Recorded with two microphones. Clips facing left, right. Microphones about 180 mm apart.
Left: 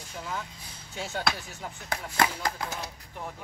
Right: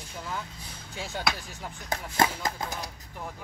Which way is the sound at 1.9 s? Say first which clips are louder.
Right 1 dB; 20° right (ahead or behind).